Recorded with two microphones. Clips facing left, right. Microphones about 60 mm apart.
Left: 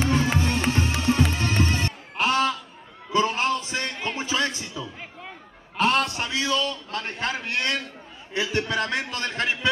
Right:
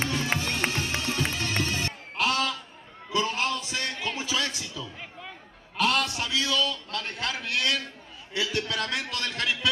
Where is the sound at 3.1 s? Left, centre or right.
Left.